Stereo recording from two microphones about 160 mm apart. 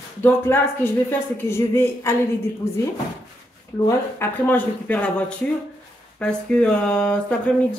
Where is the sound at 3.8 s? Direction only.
15° left (ahead or behind).